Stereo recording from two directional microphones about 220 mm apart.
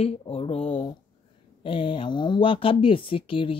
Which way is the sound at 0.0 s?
25° left (ahead or behind).